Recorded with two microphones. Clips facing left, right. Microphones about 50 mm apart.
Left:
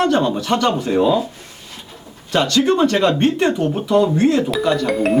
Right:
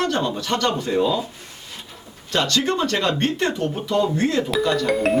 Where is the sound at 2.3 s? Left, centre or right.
Centre.